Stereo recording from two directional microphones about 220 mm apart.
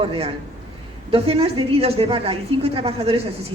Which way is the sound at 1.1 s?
25° right (ahead or behind).